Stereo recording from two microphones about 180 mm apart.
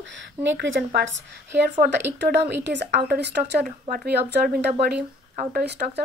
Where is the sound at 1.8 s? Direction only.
70° right (ahead or behind).